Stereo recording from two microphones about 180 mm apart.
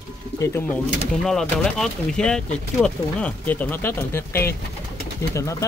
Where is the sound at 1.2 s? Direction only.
Centre (ahead or behind).